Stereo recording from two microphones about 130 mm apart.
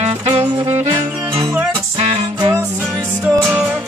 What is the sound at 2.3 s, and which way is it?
Music, 30° right (ahead or behind).